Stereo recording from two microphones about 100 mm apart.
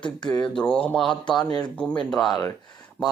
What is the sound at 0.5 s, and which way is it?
Speech, 10° left (ahead or behind).